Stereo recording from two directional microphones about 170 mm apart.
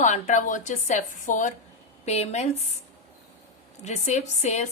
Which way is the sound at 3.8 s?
40° left (ahead or behind).